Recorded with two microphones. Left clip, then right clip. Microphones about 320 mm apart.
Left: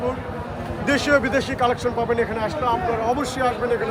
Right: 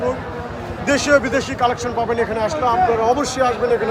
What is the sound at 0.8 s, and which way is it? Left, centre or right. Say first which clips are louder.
A man's voice: right 4 dB; centre.